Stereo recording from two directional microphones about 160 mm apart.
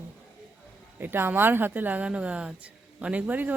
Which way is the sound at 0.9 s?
15° right (ahead or behind).